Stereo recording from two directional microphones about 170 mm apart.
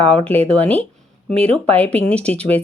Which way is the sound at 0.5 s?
10° left (ahead or behind).